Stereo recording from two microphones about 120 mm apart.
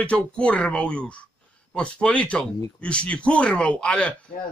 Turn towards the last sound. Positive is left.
turn(degrees=10)  # may be behind; listen again after turning